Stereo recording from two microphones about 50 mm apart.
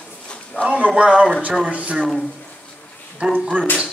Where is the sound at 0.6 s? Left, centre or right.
Right.